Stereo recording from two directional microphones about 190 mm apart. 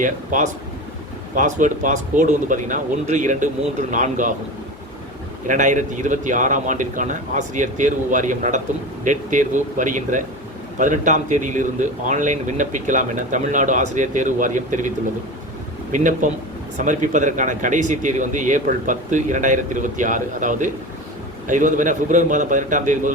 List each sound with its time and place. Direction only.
0.0 s a man's voice: 40° right (ahead or behind)
5.5 s a man's voice: 40° right (ahead or behind)